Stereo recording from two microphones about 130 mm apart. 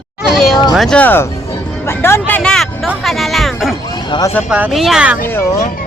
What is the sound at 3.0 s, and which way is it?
Music, centre (ahead or behind).